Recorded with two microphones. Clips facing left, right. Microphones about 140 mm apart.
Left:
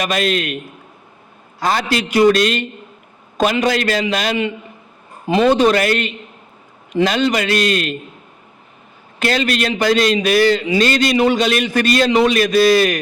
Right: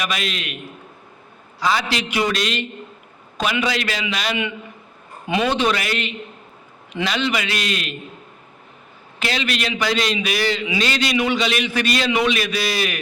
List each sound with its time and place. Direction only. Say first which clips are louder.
0.0 s a man's voice: left 8 dB; 45° left (ahead or behind)
9.1 s a man's voice: left 6 dB; 45° left (ahead or behind)